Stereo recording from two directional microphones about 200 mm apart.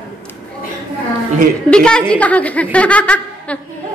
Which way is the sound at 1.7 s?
5° left (ahead or behind).